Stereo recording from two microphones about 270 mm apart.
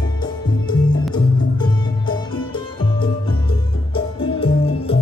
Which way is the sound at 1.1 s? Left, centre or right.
Centre.